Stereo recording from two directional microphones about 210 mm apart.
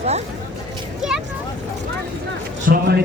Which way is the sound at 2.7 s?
50° right (ahead or behind).